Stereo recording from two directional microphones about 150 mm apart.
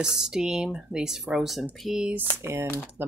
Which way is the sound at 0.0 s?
5° right (ahead or behind).